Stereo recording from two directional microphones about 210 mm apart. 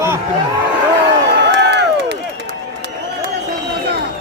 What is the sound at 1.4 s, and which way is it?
Run, 55° right (ahead or behind).